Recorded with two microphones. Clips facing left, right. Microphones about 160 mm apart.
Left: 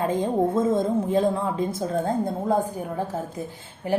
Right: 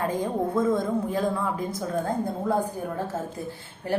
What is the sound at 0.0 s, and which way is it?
A woman's voice, 20° left (ahead or behind).